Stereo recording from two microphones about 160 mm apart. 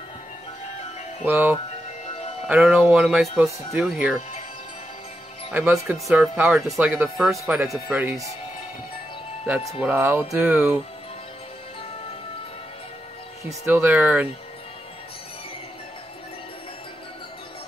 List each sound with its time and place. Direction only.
1.2 s speech: 10° right (ahead or behind)
2.0 s music: 40° left (ahead or behind)
2.4 s speech: 5° right (ahead or behind)
5.5 s speech: 10° right (ahead or behind)
9.7 s speech: 10° right (ahead or behind)
13.5 s speech: 15° right (ahead or behind)